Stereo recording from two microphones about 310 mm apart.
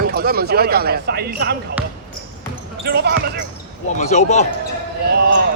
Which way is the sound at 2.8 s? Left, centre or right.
Right.